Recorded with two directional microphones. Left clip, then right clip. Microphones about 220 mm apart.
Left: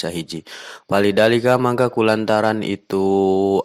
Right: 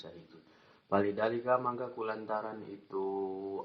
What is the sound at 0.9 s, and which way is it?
Speech, 70° left (ahead or behind).